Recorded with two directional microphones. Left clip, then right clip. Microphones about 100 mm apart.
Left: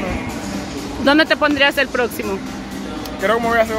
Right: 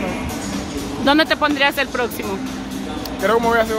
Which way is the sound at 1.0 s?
35° left (ahead or behind).